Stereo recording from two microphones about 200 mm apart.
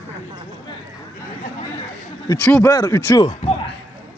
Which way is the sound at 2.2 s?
15° left (ahead or behind).